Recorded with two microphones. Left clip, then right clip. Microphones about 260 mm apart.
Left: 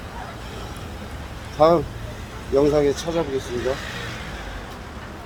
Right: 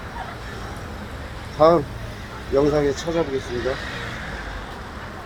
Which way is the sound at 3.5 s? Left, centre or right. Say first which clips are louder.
Left 1 dB; left.